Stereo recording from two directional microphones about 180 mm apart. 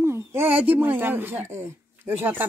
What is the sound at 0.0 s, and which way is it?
Speech, 15° right (ahead or behind).